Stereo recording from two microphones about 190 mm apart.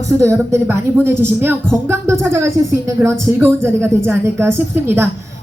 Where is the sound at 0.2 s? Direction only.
15° right (ahead or behind).